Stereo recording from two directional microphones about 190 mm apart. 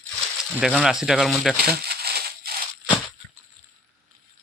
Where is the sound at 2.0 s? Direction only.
55° right (ahead or behind).